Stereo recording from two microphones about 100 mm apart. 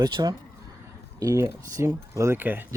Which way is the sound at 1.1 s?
35° right (ahead or behind).